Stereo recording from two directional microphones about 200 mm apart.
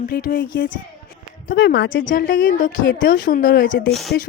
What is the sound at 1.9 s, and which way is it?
Speech, 40° left (ahead or behind).